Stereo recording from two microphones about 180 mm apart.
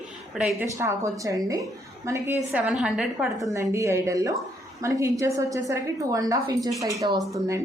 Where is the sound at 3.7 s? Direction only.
15° right (ahead or behind).